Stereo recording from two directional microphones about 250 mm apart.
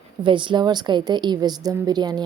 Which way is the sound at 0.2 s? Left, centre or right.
Centre.